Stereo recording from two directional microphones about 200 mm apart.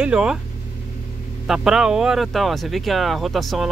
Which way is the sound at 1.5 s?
5° right (ahead or behind).